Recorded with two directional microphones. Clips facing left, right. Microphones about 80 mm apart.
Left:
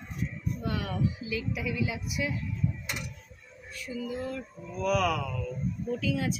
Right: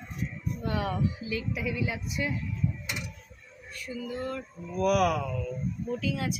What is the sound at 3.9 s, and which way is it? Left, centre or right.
Speech, right.